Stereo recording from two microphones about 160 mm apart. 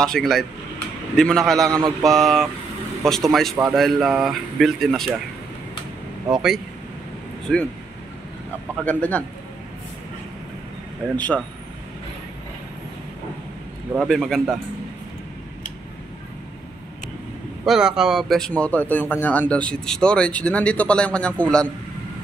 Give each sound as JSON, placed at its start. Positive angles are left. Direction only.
{"t": 0.0, "sound": "speech", "side_deg": 5}
{"t": 1.7, "sound": "mantra", "side_deg": -20}
{"t": 2.0, "sound": "speech", "side_deg": 0}
{"t": 6.3, "sound": "speech", "side_deg": 0}
{"t": 8.8, "sound": "speech", "side_deg": 10}
{"t": 11.1, "sound": "speech", "side_deg": 10}
{"t": 13.9, "sound": "speech", "side_deg": 0}
{"t": 17.6, "sound": "speech", "side_deg": -5}